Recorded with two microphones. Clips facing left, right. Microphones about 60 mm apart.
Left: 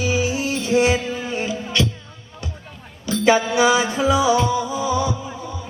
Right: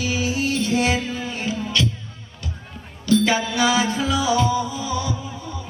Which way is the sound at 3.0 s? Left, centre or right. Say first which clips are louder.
Left 2 dB; left.